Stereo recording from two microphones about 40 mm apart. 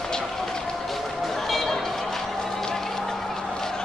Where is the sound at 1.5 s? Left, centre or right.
Centre.